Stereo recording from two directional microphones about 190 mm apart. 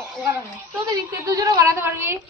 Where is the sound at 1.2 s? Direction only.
20° right (ahead or behind).